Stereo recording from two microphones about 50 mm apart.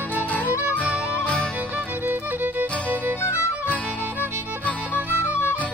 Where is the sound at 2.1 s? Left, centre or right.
Right.